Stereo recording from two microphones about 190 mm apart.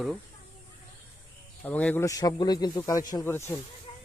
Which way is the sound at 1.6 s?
10° left (ahead or behind).